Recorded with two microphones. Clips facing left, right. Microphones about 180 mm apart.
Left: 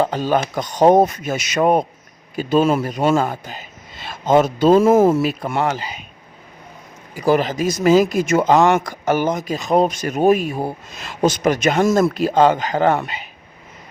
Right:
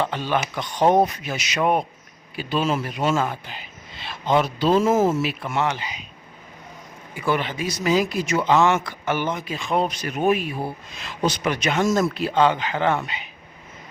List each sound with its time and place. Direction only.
0.0 s a man's voice: 40° left (ahead or behind)
3.2 s speech: 40° left (ahead or behind); by 5.2 s 60° left (ahead or behind)
5.2 s speech: 40° left (ahead or behind)
7.1 s speech: 40° left (ahead or behind); by 12.1 s 55° left (ahead or behind)
12.1 s speech: 45° left (ahead or behind)